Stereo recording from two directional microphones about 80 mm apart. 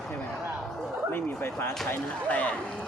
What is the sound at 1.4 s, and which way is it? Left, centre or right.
Speech, left.